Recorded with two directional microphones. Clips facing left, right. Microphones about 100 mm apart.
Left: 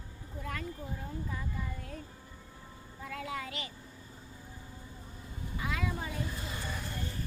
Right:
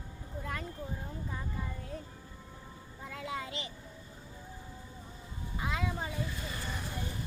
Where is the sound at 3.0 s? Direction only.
20° right (ahead or behind).